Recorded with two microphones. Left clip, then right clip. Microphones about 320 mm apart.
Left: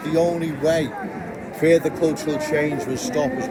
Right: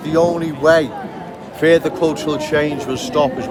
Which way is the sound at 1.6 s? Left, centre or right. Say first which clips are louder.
Right 4 dB; centre.